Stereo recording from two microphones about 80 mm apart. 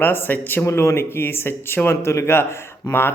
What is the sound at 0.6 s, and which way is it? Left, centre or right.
Speech, left.